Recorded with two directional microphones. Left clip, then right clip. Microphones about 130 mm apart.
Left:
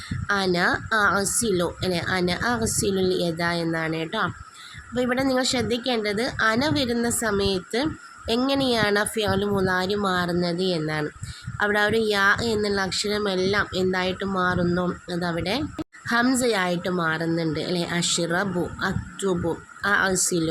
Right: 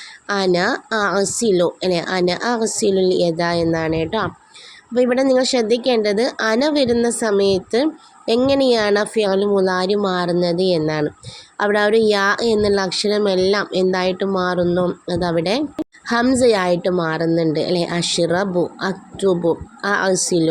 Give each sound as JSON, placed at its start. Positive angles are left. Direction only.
{"t": 0.3, "sound": "speech", "side_deg": -25}